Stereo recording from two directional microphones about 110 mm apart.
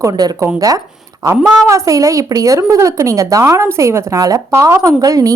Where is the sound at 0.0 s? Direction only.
35° right (ahead or behind).